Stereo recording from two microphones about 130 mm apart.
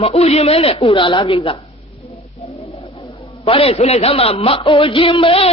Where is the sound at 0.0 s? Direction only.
50° left (ahead or behind).